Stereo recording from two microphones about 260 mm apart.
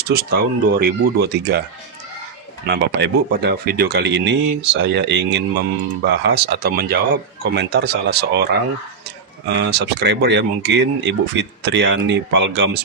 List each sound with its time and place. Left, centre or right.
0.1 s speech: right
2.6 s speech: right
9.7 s speech: right